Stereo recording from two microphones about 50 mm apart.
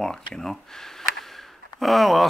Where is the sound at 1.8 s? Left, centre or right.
Centre.